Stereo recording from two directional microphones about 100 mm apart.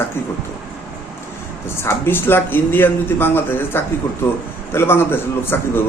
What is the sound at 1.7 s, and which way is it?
Speech, 25° left (ahead or behind).